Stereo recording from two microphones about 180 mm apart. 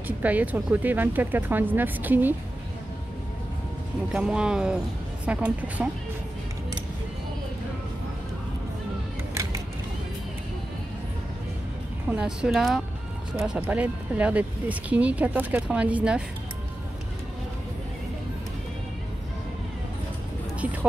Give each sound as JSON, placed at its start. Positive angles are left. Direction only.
{"t": 0.2, "sound": "speech", "side_deg": -10}
{"t": 4.1, "sound": "speech", "side_deg": -5}
{"t": 9.3, "sound": "vehicle", "side_deg": -15}
{"t": 12.1, "sound": "speech", "side_deg": -5}